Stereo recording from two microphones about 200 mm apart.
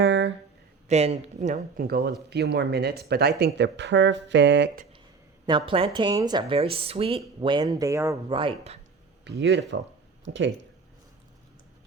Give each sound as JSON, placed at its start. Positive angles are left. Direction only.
{"t": 0.0, "sound": "a sound", "side_deg": -65}
{"t": 0.9, "sound": "speech", "side_deg": -30}
{"t": 5.5, "sound": "speech", "side_deg": -25}
{"t": 8.3, "sound": "speech", "side_deg": -25}
{"t": 9.2, "sound": "speech", "side_deg": -60}